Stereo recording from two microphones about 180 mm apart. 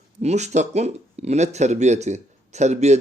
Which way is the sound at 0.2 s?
40° right (ahead or behind).